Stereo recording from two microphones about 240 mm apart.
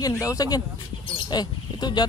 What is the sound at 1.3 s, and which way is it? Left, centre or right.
Bird, centre.